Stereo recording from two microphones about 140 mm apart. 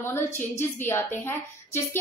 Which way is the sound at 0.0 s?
15° left (ahead or behind).